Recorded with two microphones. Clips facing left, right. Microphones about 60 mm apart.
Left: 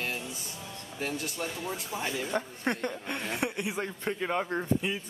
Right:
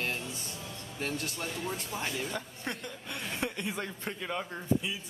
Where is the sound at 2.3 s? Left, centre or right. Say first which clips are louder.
Left 7 dB; left.